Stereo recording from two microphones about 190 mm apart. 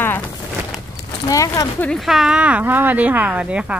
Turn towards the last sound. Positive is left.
turn(degrees=-5)  # may be behind; listen again after turning